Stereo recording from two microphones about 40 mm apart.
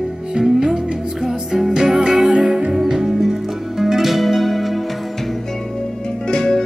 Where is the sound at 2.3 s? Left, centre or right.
Right; by 4.8 s centre.